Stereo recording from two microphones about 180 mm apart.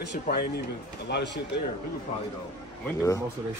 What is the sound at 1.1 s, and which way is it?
Speech, 75° left (ahead or behind).